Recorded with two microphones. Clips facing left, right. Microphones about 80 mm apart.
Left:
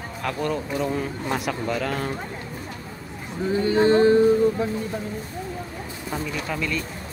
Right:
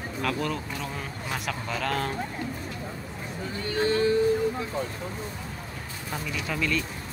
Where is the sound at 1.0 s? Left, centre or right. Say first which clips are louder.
Left 7 dB; centre.